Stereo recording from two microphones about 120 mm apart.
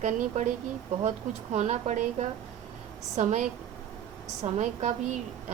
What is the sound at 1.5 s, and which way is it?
Speech, 85° right.